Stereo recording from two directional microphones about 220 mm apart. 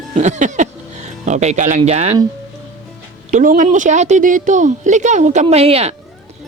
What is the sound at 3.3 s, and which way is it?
Speech, 35° right (ahead or behind).